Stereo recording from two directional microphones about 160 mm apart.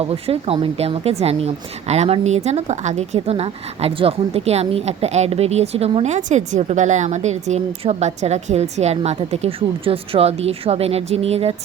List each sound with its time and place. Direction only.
0.0 s a woman's voice: 35° right (ahead or behind)